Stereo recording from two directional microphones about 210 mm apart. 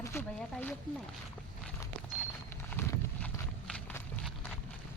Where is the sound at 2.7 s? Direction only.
10° left (ahead or behind).